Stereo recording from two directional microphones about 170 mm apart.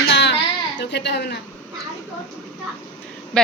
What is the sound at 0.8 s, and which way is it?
Speech, 85° left.